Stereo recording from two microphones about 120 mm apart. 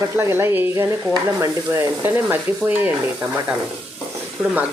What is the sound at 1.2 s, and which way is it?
Stir, 20° right (ahead or behind).